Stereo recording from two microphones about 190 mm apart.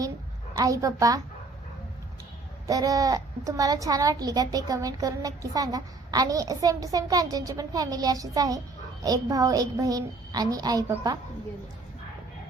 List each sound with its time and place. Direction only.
0.5 s a woman's voice: 20° right (ahead or behind)
2.6 s a child's voice: 20° right (ahead or behind)